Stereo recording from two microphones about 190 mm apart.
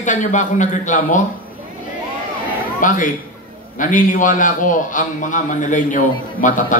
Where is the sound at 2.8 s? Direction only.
45° left (ahead or behind).